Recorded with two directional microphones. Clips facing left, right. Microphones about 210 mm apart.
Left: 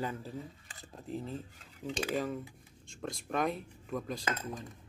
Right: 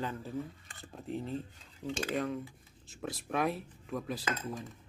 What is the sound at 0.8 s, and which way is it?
Speech, centre (ahead or behind).